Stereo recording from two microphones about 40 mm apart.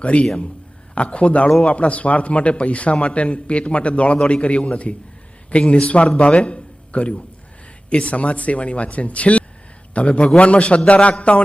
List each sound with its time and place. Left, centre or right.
0.0 s a man's voice: left